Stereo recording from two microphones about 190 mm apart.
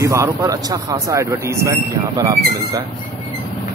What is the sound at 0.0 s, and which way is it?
Speech, 15° right (ahead or behind).